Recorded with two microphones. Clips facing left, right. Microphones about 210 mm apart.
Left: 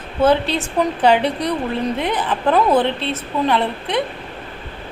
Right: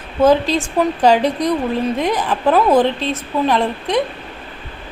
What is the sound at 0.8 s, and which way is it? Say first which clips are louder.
Speech: right 2 dB; 5° right (ahead or behind).